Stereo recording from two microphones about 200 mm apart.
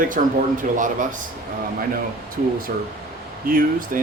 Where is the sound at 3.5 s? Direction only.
45° right (ahead or behind).